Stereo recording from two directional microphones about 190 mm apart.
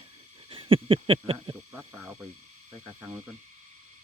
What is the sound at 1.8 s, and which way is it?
Speech, 10° right (ahead or behind).